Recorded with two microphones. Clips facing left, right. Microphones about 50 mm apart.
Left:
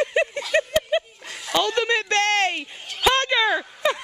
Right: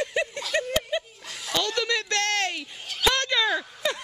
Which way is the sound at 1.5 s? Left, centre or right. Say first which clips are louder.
Left 5 dB; left.